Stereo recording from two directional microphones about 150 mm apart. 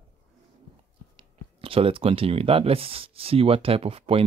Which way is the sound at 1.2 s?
40° right (ahead or behind).